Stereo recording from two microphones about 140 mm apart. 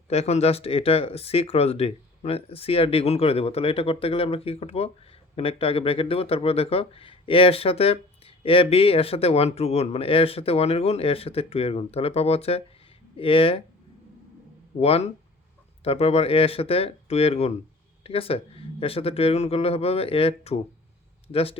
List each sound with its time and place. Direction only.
0.1 s speech: 50° left (ahead or behind)
14.8 s speech: 45° left (ahead or behind)